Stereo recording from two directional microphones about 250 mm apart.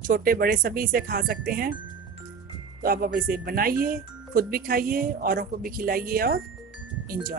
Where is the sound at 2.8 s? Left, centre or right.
Right.